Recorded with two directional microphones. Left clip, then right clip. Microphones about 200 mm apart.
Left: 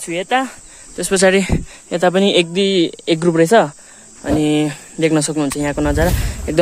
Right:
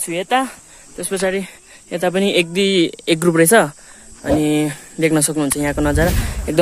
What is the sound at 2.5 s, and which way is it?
Speech, centre (ahead or behind).